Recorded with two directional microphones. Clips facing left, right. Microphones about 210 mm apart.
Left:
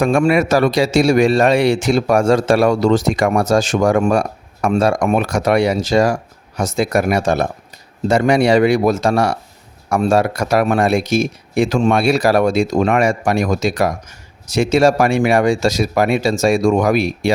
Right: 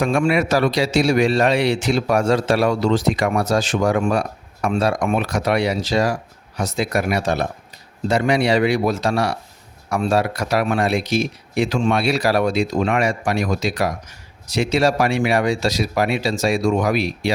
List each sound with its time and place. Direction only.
0.0 s speech: 45° left (ahead or behind)